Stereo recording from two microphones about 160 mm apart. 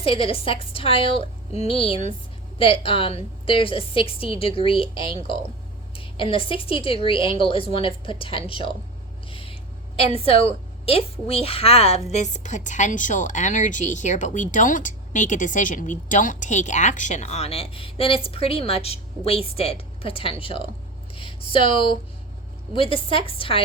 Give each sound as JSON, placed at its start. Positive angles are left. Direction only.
{"t": 0.0, "sound": "a woman's voice", "side_deg": 35}